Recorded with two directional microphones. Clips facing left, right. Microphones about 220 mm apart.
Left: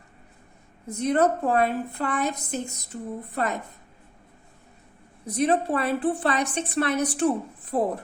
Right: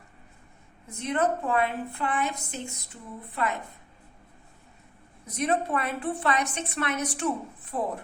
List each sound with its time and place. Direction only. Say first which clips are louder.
0.9 s a woman's voice: left 5 dB; 40° left (ahead or behind)
5.2 s a woman's voice: left 4 dB; 30° left (ahead or behind)